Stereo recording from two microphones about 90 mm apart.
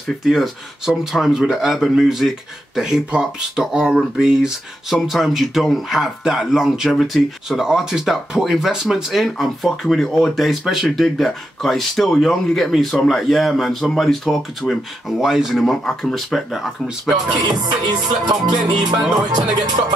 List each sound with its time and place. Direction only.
0.2 s speech: centre (ahead or behind)
17.4 s music: 50° right (ahead or behind)